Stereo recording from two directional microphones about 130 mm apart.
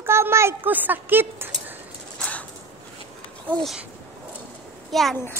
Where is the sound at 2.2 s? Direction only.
10° left (ahead or behind).